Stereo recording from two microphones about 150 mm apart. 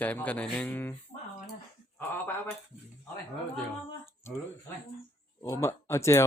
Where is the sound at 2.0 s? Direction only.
10° left (ahead or behind).